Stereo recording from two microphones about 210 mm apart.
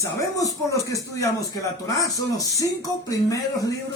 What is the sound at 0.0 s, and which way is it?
Speech, 15° left (ahead or behind).